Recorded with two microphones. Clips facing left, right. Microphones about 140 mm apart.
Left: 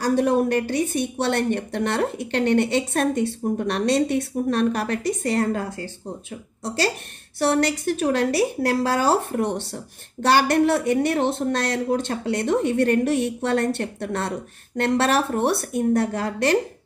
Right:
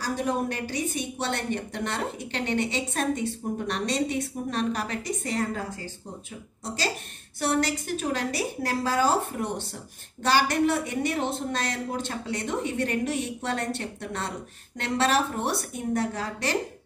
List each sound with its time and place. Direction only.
0.0 s a woman's voice: 60° left (ahead or behind)